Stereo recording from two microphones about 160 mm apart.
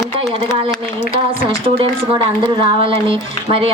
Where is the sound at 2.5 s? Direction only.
30° right (ahead or behind).